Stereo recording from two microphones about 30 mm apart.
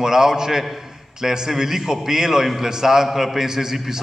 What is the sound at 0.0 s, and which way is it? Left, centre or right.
Mantra, centre.